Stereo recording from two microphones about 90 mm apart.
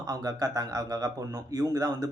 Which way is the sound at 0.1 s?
40° right (ahead or behind).